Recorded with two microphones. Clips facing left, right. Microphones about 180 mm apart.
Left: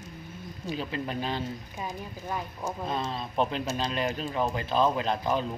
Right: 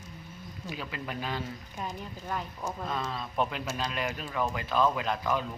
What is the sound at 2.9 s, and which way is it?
Speech, 25° left (ahead or behind).